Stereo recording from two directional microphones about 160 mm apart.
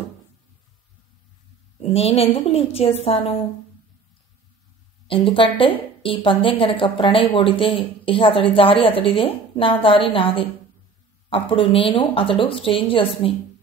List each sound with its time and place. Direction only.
1.8 s speech: 35° left (ahead or behind)
5.0 s speech: 35° left (ahead or behind)